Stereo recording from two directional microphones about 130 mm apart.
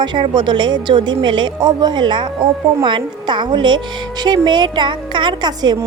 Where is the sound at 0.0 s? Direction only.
35° right (ahead or behind).